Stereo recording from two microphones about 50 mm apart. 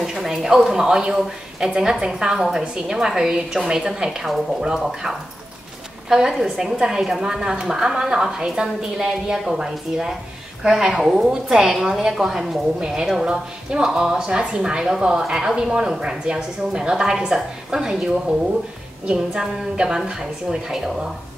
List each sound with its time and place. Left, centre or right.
0.0 s speech: centre
19.1 s speech: centre